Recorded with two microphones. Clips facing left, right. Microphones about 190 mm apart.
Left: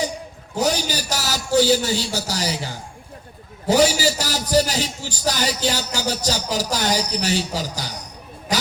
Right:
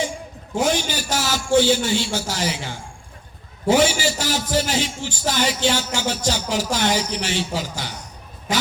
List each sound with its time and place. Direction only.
0.5 s a man's voice: 40° left (ahead or behind)